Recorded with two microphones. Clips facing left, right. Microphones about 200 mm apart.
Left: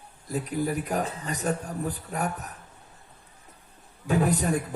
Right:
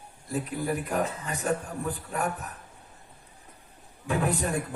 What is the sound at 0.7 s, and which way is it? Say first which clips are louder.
A man's voice: even; 40° left (ahead or behind).